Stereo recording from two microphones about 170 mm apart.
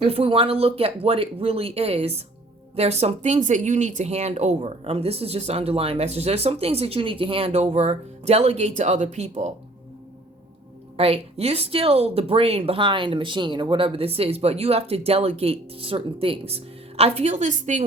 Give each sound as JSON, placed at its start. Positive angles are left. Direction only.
{"t": 0.0, "sound": "speech", "side_deg": -35}
{"t": 10.9, "sound": "speech", "side_deg": -35}